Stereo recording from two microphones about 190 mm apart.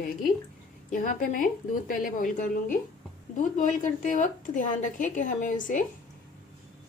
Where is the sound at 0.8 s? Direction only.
45° left (ahead or behind).